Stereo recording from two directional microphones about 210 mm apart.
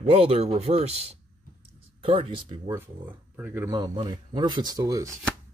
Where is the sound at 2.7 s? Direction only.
10° right (ahead or behind).